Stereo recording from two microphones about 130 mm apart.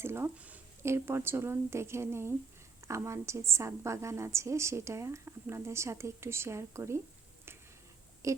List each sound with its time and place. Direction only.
0.0 s a woman's voice: 20° right (ahead or behind)
8.2 s speech: 25° right (ahead or behind)